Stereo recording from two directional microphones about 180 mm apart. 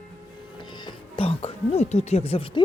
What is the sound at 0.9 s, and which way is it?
Speech, 30° left (ahead or behind).